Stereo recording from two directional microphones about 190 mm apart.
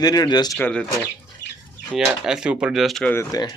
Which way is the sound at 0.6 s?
5° left (ahead or behind).